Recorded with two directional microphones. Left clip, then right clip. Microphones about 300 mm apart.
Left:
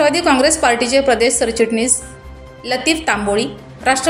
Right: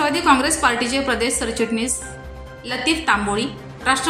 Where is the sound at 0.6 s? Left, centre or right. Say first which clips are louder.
Left 4 dB; right.